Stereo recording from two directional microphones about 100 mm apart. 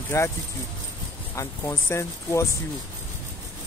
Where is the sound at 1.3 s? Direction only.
30° left (ahead or behind).